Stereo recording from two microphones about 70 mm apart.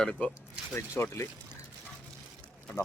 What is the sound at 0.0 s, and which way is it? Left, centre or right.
Speech, centre.